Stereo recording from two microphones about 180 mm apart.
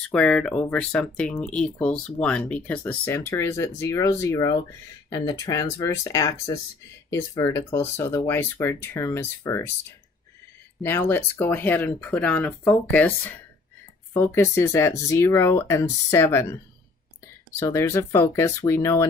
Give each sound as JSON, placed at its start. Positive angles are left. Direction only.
{"t": 0.0, "sound": "speech", "side_deg": 5}
{"t": 10.8, "sound": "speech", "side_deg": 10}
{"t": 17.6, "sound": "speech", "side_deg": 15}